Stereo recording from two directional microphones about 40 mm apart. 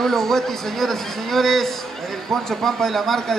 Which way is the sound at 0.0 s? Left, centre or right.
Centre.